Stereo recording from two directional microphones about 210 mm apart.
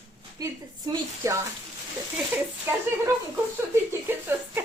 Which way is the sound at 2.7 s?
10° right (ahead or behind).